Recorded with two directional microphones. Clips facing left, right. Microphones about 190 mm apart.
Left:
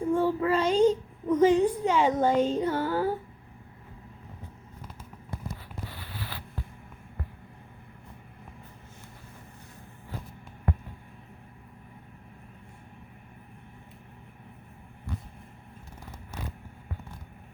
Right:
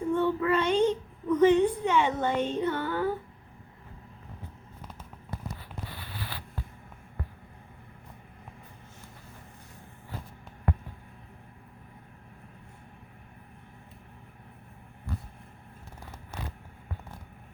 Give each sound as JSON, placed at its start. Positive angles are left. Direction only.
{"t": 0.1, "sound": "a child's voice", "side_deg": 35}